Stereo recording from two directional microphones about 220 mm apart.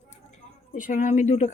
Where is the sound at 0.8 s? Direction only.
35° left (ahead or behind).